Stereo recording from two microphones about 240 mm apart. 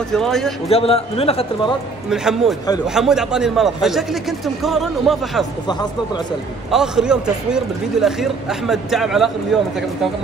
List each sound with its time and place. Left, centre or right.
0.1 s a man's voice: centre
0.7 s a man's voice: left
2.0 s a man's voice: centre
5.7 s speech: centre
6.7 s a man's voice: centre